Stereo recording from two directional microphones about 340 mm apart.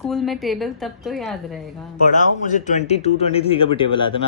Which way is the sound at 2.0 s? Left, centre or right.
Left.